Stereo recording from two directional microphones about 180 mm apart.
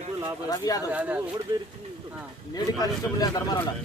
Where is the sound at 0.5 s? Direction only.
20° left (ahead or behind).